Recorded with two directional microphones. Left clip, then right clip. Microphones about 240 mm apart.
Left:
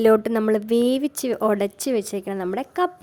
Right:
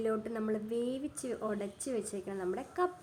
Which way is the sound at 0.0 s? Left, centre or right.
Left.